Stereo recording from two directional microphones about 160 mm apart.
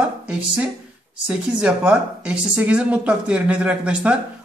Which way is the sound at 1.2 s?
5° right (ahead or behind).